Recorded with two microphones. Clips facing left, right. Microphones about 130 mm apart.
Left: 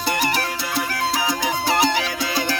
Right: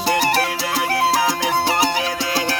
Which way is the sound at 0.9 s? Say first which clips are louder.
Right 7 dB; 90° right.